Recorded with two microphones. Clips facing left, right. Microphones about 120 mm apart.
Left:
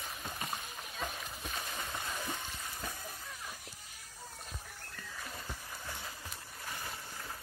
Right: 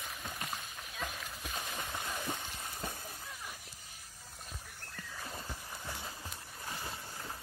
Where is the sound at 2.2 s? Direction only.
15° right (ahead or behind).